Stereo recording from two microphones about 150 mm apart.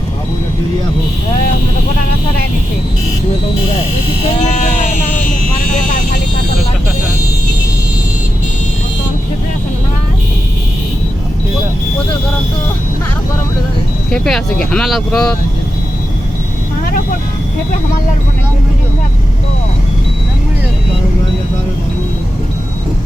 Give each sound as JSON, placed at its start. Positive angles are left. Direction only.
{"t": 4.4, "sound": "sheep", "side_deg": 55}
{"t": 14.1, "sound": "speech", "side_deg": 5}